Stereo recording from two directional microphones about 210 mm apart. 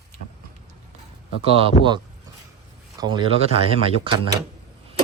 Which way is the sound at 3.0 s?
20° right (ahead or behind).